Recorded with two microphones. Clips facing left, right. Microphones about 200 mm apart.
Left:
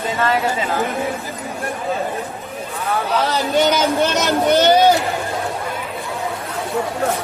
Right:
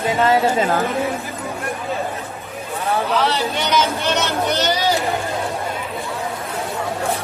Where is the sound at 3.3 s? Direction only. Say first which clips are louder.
Left 4 dB; 45° left (ahead or behind).